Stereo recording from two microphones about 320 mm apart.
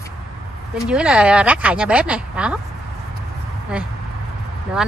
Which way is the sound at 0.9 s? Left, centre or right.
Centre.